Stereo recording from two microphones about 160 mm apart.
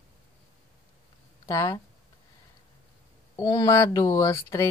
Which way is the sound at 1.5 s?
20° left (ahead or behind).